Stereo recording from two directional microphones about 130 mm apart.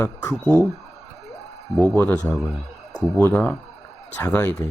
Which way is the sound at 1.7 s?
Centre (ahead or behind).